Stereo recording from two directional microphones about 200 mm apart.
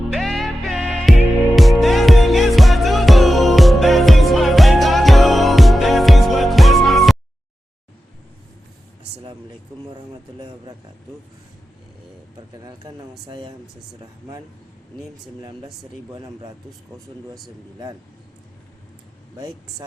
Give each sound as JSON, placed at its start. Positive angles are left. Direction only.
{"t": 0.1, "sound": "music", "side_deg": 0}
{"t": 9.9, "sound": "speech", "side_deg": -20}
{"t": 12.6, "sound": "speech", "side_deg": -20}
{"t": 15.4, "sound": "speech", "side_deg": -20}